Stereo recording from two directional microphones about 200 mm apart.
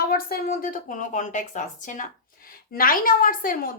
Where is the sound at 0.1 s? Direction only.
45° left (ahead or behind).